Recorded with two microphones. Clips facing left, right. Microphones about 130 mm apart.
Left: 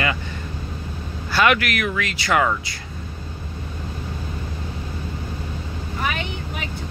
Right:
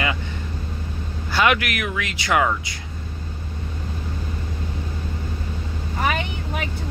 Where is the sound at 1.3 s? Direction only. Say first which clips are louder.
Left 1 dB; 15° right (ahead or behind).